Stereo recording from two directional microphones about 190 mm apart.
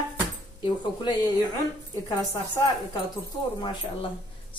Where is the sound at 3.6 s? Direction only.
25° left (ahead or behind).